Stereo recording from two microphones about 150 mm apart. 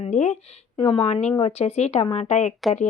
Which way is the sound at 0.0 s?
45° left (ahead or behind).